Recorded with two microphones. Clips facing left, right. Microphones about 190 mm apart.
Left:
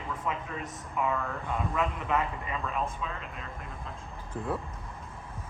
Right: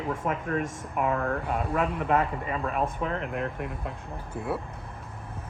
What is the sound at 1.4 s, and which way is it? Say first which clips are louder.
Speech: right 4 dB; 40° right (ahead or behind).